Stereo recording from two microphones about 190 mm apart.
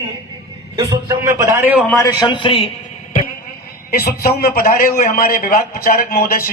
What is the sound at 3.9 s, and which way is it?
A man's voice, 50° left (ahead or behind).